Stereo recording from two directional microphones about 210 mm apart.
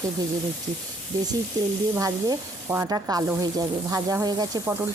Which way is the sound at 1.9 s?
15° right (ahead or behind).